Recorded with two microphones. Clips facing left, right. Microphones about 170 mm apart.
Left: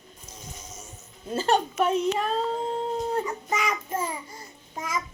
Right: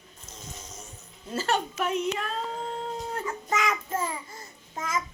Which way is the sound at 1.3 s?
30° left (ahead or behind).